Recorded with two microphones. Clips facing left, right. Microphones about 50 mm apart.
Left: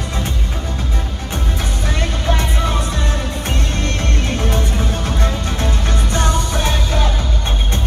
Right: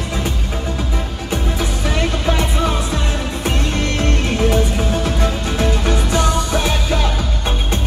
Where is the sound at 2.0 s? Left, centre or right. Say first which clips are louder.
Right 2 dB; right.